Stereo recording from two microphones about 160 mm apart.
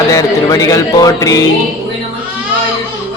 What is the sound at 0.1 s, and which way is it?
Speech, 20° left (ahead or behind).